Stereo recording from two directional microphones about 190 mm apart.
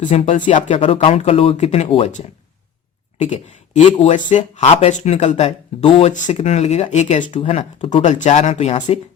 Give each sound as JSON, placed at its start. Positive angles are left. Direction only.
{"t": 0.0, "sound": "speech", "side_deg": 40}
{"t": 7.3, "sound": "speech", "side_deg": 30}
{"t": 8.0, "sound": "speech", "side_deg": 40}